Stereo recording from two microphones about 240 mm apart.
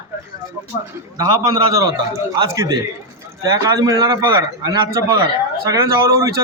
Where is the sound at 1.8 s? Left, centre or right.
Centre.